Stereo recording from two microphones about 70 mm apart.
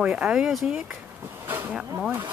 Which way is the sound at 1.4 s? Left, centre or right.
Right.